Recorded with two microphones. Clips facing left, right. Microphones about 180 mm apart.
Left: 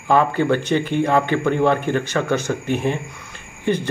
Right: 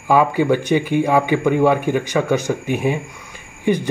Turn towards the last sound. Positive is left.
turn(degrees=-15)  # may be behind; listen again after turning